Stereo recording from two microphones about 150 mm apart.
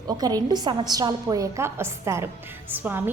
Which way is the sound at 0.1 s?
25° right (ahead or behind).